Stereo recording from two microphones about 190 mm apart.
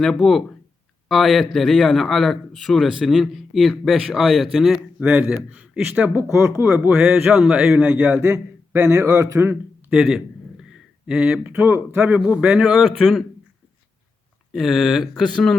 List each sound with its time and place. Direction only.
0.0 s a man's voice: centre (ahead or behind); by 9.6 s 15° right (ahead or behind)
9.9 s a man's voice: centre (ahead or behind)
14.5 s a man's voice: centre (ahead or behind)